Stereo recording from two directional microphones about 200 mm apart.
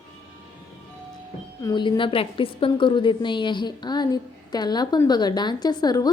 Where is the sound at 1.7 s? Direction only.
25° left (ahead or behind).